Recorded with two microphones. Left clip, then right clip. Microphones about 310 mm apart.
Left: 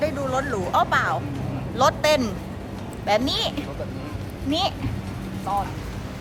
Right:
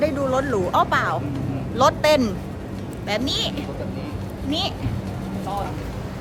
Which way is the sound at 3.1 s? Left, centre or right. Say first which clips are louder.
Left 2 dB; centre.